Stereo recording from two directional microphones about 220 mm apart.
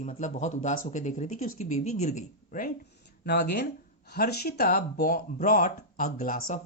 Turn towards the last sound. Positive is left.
turn(degrees=40)  # may be behind; listen again after turning